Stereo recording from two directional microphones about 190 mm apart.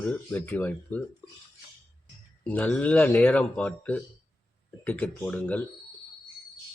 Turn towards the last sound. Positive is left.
turn(degrees=5)  # may be behind; listen again after turning